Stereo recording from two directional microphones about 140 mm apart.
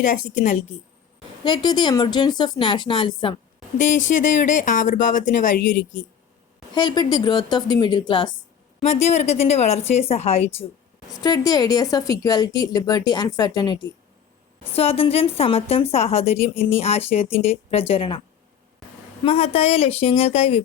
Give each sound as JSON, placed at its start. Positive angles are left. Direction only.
{"t": 0.0, "sound": "speech", "side_deg": 65}
{"t": 1.5, "sound": "a woman's voice", "side_deg": 35}
{"t": 3.8, "sound": "speech", "side_deg": 65}
{"t": 6.7, "sound": "a woman's voice", "side_deg": 35}
{"t": 8.8, "sound": "a woman's voice", "side_deg": 50}
{"t": 11.1, "sound": "speech", "side_deg": 25}
{"t": 14.8, "sound": "a woman's voice", "side_deg": 45}
{"t": 19.2, "sound": "a woman's voice", "side_deg": 45}